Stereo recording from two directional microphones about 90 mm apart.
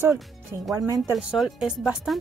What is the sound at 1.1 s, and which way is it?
Speech, 5° right (ahead or behind).